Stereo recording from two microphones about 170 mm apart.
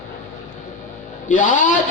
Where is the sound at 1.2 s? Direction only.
50° left (ahead or behind).